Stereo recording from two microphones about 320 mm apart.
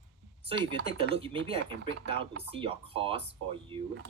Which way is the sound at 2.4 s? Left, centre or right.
Centre.